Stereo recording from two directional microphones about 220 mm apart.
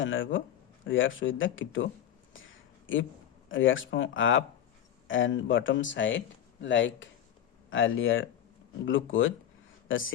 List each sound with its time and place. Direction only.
0.0 s speech: 60° left (ahead or behind)
2.3 s a sound: 60° left (ahead or behind)
3.5 s speech: 60° left (ahead or behind)